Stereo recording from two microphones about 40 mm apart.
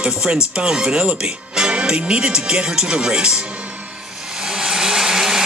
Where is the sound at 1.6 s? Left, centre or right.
Right.